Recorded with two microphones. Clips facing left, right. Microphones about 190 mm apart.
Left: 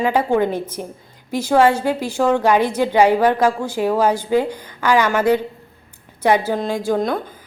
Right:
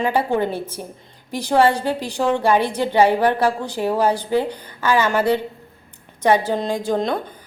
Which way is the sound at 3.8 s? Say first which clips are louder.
Left 2 dB; 10° right (ahead or behind).